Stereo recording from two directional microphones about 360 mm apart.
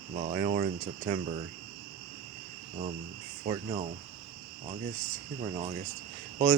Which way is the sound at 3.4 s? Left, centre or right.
Centre.